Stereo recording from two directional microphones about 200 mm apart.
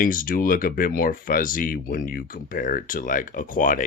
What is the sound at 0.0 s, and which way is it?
Speech, 45° left (ahead or behind).